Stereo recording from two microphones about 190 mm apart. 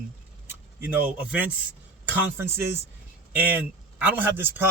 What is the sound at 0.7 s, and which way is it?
A man's voice, 10° right (ahead or behind).